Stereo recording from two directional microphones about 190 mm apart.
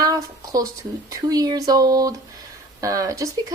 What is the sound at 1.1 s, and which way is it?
Speech, 20° right (ahead or behind).